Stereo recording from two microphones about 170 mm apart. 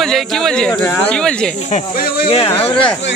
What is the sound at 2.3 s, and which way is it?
Speech, 35° left (ahead or behind).